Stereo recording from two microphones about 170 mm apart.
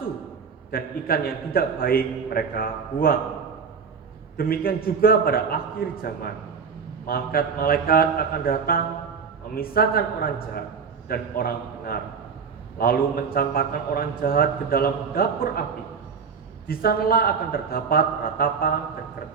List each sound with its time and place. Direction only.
0.7 s a man's voice: 60° left (ahead or behind)
4.4 s a man's voice: 60° left (ahead or behind)
16.6 s a man's voice: 60° left (ahead or behind)